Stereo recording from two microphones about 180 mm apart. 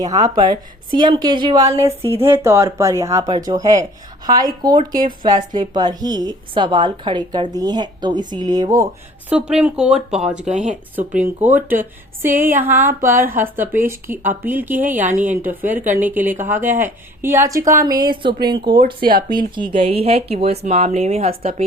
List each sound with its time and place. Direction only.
0.0 s a woman's voice: 20° right (ahead or behind)
9.3 s speech: 5° right (ahead or behind)
10.5 s speech: 40° right (ahead or behind)
10.9 s a woman's voice: 5° right (ahead or behind); by 18.8 s 25° right (ahead or behind)
18.9 s speech: 50° right (ahead or behind)
19.5 s speech: 30° right (ahead or behind)